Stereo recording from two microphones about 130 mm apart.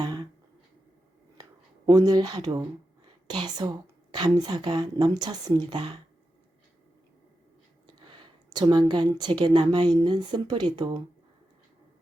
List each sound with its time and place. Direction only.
0.0 s a sound: 35° right (ahead or behind)
1.9 s a woman's voice: 30° right (ahead or behind)
8.0 s a woman's voice: 40° right (ahead or behind)